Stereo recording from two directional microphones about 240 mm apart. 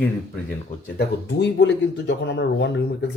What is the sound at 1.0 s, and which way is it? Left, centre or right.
Speech, left.